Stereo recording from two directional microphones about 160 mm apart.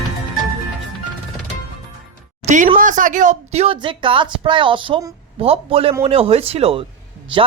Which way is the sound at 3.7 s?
30° right (ahead or behind).